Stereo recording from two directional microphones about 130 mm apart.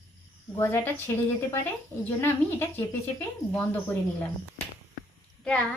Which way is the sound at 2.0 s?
15° left (ahead or behind).